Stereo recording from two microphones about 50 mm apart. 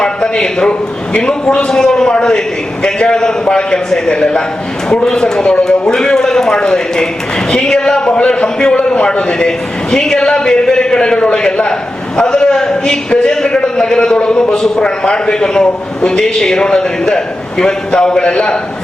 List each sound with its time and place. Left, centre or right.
0.0 s a man's voice: centre